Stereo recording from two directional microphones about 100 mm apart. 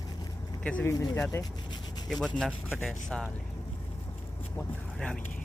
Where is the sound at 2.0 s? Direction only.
5° left (ahead or behind).